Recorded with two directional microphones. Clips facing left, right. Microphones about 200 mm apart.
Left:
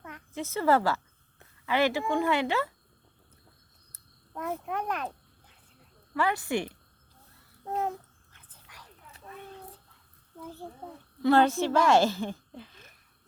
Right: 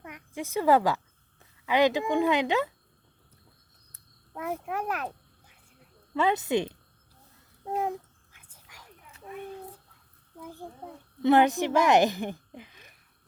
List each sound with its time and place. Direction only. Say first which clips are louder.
0.0 s a child's voice: even; 15° right (ahead or behind)
4.4 s a child's voice: right 1 dB; 10° right (ahead or behind)
6.1 s a woman's voice: right 3 dB; 20° right (ahead or behind)
7.6 s a sound: right 1 dB; 10° right (ahead or behind)
10.4 s a child's voice: even; 10° right (ahead or behind)